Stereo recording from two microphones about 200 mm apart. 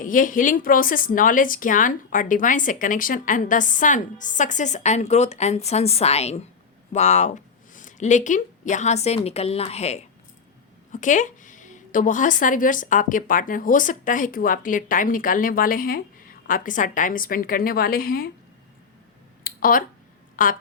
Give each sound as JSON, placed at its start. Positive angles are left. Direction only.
{"t": 0.0, "sound": "a woman's voice", "side_deg": 40}
{"t": 19.5, "sound": "a sound", "side_deg": 45}
{"t": 20.3, "sound": "a woman's voice", "side_deg": 45}